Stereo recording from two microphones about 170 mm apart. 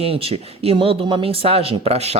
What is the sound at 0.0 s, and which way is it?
Speech, 35° right (ahead or behind).